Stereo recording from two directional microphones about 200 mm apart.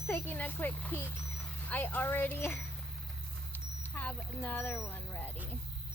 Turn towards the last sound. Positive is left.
turn(degrees=10)  # may be behind; listen again after turning